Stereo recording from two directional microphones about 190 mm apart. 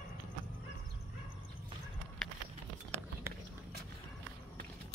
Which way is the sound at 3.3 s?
15° right (ahead or behind).